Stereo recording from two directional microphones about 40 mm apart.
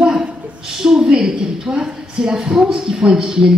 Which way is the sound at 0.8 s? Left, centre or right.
Centre.